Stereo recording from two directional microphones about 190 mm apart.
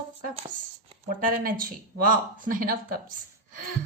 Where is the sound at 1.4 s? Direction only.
45° right (ahead or behind).